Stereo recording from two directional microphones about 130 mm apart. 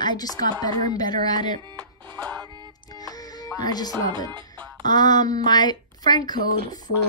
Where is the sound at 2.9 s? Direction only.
30° left (ahead or behind).